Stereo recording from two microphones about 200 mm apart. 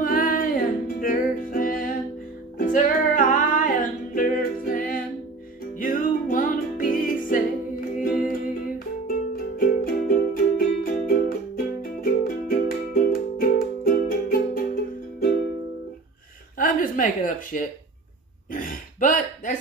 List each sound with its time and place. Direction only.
0.0 s music: 45° left (ahead or behind)
16.5 s a sound: 40° left (ahead or behind)
18.5 s throat clearing: 45° left (ahead or behind)